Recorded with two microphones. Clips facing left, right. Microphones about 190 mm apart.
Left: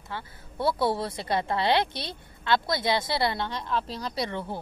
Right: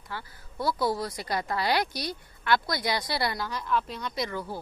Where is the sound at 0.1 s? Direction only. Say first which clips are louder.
Left 2 dB; 25° left (ahead or behind).